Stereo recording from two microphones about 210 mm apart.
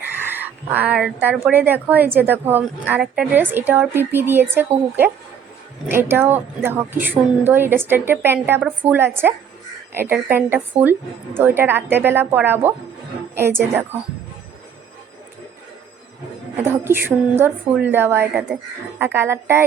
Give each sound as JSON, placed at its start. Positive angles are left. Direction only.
{"t": 0.3, "sound": "a woman's voice", "side_deg": -10}
{"t": 5.9, "sound": "a woman's voice", "side_deg": -10}
{"t": 16.6, "sound": "a woman's voice", "side_deg": -10}